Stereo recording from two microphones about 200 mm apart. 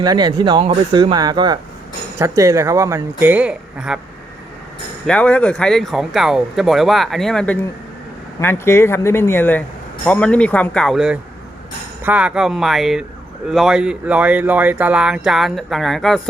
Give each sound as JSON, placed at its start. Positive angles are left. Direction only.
{"t": 0.0, "sound": "speech", "side_deg": -20}
{"t": 5.0, "sound": "speech", "side_deg": 5}